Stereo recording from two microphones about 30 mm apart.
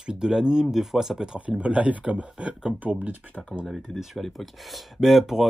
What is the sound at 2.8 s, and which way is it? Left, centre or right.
Speech, right.